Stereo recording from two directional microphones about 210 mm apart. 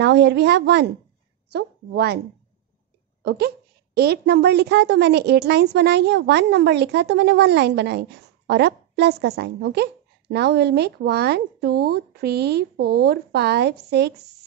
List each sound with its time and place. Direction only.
0.0 s a woman's voice: 55° right (ahead or behind)
3.3 s a woman's voice: 50° right (ahead or behind)